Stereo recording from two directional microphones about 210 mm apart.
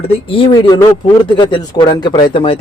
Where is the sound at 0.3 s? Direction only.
25° left (ahead or behind).